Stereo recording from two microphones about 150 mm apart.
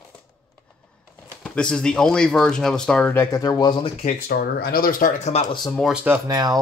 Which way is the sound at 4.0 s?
65° left (ahead or behind).